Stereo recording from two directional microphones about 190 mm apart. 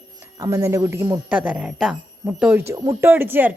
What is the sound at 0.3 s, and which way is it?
A woman's voice, 15° right (ahead or behind).